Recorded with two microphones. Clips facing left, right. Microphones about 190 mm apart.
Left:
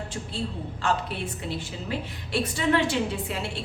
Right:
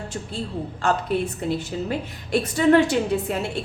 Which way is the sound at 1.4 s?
50° right (ahead or behind).